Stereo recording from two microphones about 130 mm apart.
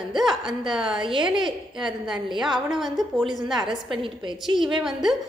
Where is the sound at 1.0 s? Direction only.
40° right (ahead or behind).